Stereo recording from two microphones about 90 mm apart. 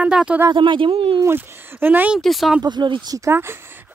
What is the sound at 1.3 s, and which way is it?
Speech, 20° right (ahead or behind).